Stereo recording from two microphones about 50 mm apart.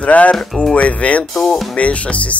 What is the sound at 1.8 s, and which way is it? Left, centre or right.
Speech, left.